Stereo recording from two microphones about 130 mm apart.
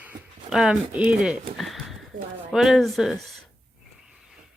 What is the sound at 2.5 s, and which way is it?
Speech, centre (ahead or behind).